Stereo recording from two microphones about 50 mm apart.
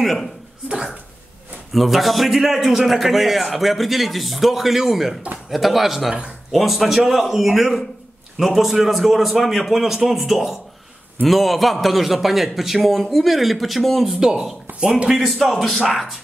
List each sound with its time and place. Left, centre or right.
0.0 s a man's voice: centre
0.7 s speech: centre
1.7 s a man's voice: centre
14.2 s a man's voice: centre